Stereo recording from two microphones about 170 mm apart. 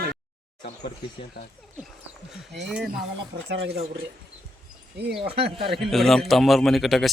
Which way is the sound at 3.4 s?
80° right.